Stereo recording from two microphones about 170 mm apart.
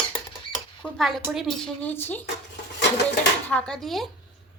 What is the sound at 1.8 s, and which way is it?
Speech, 10° left (ahead or behind).